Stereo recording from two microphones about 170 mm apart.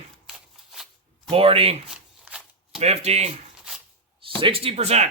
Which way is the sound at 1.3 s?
35° right (ahead or behind).